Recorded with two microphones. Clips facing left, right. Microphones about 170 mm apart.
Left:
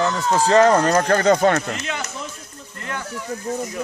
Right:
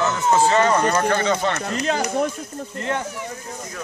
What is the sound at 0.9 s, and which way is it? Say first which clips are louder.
Speech: left 4 dB; 45° left (ahead or behind).